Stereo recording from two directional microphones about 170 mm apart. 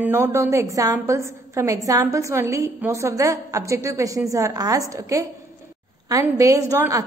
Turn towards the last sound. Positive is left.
turn(degrees=-20)  # may be behind; listen again after turning